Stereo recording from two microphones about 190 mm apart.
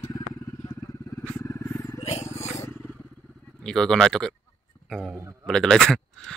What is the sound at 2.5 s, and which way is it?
Vehicle, 15° left (ahead or behind).